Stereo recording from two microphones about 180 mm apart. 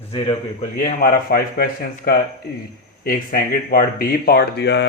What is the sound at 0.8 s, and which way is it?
Speech, 50° left (ahead or behind).